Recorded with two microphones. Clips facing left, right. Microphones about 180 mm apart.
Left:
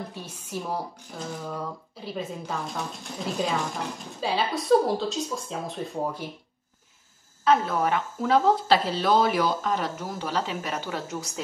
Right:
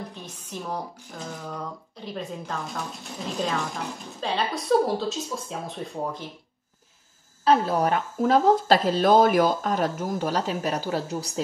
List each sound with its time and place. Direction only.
0.1 s speech: 10° left (ahead or behind)
7.4 s speech: 35° right (ahead or behind)